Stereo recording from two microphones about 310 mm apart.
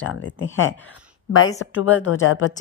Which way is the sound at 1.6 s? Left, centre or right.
Left.